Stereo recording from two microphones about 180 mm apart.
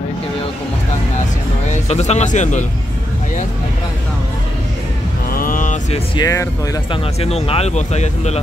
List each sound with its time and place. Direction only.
1.7 s speech: 40° left (ahead or behind)
5.3 s vehicle: 50° left (ahead or behind)
6.1 s speech: 20° left (ahead or behind)
7.2 s speech: 35° left (ahead or behind)